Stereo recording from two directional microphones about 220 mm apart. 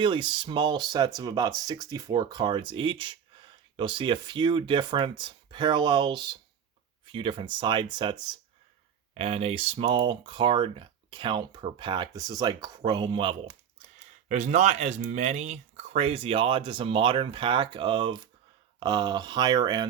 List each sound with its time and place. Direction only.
0.0 s speech: 20° right (ahead or behind)
14.3 s speech: 35° right (ahead or behind)